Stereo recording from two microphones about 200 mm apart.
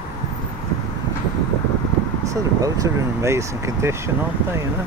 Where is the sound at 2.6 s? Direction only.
15° right (ahead or behind).